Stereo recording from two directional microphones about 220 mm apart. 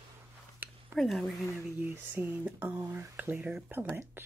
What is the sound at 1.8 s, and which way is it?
Speech, 10° right (ahead or behind).